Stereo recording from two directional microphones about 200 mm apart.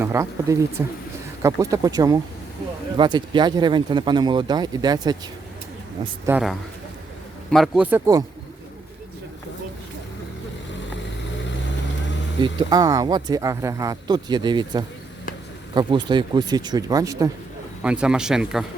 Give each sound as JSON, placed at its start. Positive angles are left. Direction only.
{"t": 0.0, "sound": "speech", "side_deg": -15}
{"t": 6.2, "sound": "speech", "side_deg": -5}
{"t": 12.4, "sound": "speech", "side_deg": -20}
{"t": 17.8, "sound": "speech", "side_deg": -5}